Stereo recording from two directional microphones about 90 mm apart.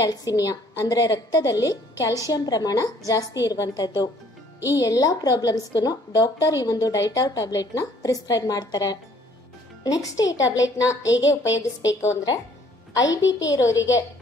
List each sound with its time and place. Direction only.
0.0 s a woman's voice: 45° left (ahead or behind)